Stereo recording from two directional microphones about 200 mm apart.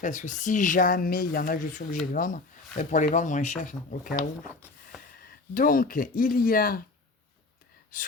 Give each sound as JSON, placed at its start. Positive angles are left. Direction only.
{"t": 0.0, "sound": "speech", "side_deg": 40}